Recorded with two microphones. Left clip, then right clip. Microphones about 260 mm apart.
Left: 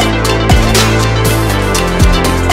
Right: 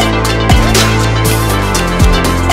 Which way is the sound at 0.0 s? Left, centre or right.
Centre.